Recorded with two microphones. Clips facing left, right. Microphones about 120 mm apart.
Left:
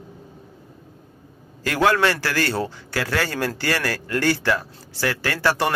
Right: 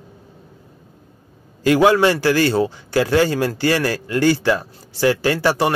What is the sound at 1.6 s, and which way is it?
A man's voice, 20° right (ahead or behind).